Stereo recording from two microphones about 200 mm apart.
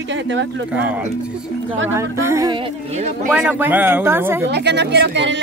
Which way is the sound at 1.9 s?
15° right (ahead or behind).